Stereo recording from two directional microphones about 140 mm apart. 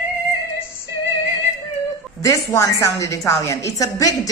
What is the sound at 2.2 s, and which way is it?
A woman's voice, 25° left (ahead or behind).